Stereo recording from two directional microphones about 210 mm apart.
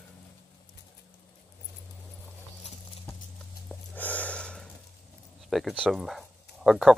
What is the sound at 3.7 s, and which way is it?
Snort, 5° left (ahead or behind).